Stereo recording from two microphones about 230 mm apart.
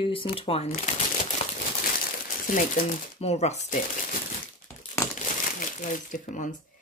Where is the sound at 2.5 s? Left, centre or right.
Left.